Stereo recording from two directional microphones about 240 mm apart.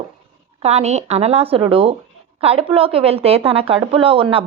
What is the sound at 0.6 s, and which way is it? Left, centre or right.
A woman's voice, right.